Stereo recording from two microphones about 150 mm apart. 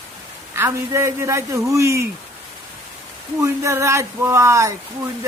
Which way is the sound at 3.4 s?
20° right (ahead or behind).